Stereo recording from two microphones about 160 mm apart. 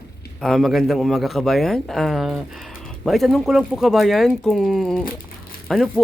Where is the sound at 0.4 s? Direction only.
Centre (ahead or behind).